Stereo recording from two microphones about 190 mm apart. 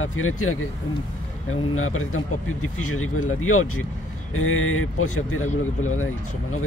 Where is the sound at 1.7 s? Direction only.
90° left.